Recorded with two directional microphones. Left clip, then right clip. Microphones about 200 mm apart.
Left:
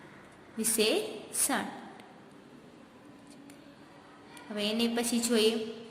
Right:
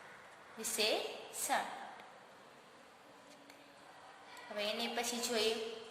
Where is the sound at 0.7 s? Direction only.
10° left (ahead or behind).